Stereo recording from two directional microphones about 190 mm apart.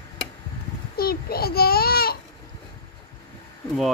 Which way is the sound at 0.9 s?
50° left (ahead or behind).